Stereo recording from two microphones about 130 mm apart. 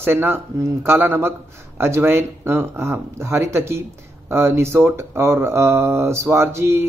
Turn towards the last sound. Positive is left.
turn(degrees=-20)  # may be behind; listen again after turning